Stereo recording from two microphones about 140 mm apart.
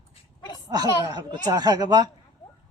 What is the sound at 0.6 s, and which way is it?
Speech, 25° right (ahead or behind).